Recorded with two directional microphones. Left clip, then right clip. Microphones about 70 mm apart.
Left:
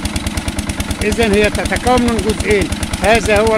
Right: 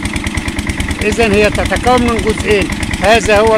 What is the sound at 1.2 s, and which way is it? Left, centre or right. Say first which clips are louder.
Speech: right 3 dB; left.